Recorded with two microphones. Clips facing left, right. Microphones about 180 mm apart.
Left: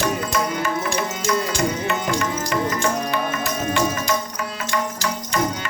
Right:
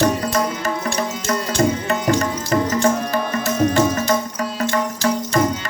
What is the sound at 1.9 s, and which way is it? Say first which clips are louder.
Tabla: right 4 dB; 40° right (ahead or behind).